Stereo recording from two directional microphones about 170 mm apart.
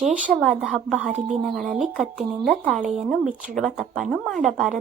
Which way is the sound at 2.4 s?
Centre (ahead or behind).